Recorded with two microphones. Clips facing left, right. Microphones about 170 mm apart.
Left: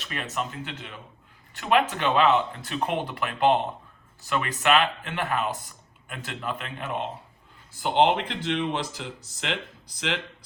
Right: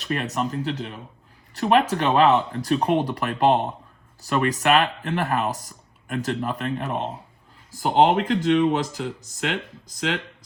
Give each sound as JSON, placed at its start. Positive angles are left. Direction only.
{"t": 0.0, "sound": "speech", "side_deg": -40}